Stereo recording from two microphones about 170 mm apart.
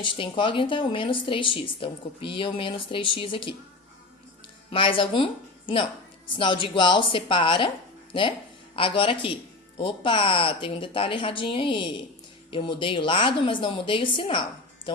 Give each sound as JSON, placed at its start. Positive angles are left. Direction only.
{"t": 0.0, "sound": "speech", "side_deg": 30}
{"t": 4.7, "sound": "a woman's voice", "side_deg": 30}
{"t": 8.7, "sound": "a woman's voice", "side_deg": 30}